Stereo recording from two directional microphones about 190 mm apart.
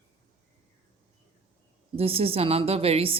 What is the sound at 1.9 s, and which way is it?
A woman's voice, 30° right (ahead or behind).